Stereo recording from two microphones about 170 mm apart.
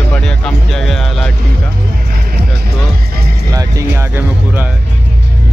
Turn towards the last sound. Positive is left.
turn(degrees=-10)  # may be behind; listen again after turning